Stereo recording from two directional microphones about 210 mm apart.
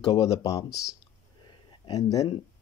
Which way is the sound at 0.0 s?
20° left (ahead or behind).